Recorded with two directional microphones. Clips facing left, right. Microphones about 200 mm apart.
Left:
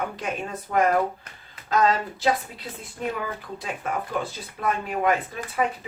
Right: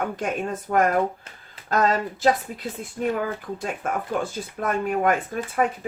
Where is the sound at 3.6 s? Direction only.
50° right (ahead or behind).